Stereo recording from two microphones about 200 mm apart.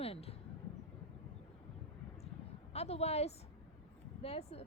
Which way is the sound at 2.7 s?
30° left (ahead or behind).